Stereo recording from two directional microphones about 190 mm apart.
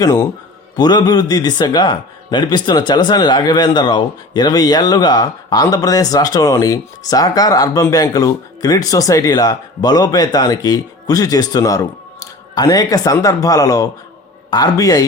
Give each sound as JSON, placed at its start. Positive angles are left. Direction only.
{"t": 0.0, "sound": "a man's voice", "side_deg": 15}